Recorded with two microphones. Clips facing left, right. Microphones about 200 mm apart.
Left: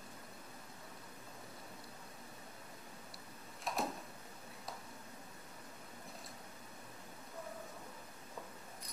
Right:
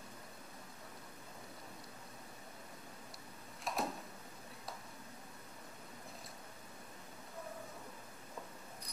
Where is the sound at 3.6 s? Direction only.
Centre (ahead or behind).